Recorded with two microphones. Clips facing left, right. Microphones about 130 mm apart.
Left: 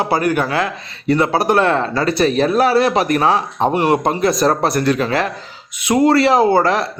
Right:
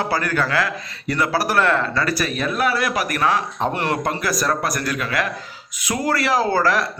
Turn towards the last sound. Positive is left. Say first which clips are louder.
# left 5 dB
turn(degrees=25)  # may be behind; listen again after turning